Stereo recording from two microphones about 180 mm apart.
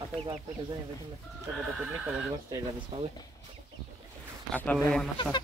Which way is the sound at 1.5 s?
5° right (ahead or behind).